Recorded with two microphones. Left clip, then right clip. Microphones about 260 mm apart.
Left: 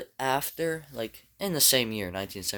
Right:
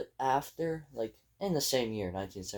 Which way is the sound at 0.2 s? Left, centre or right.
Left.